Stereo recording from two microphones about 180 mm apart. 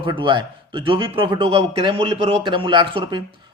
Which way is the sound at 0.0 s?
25° right (ahead or behind).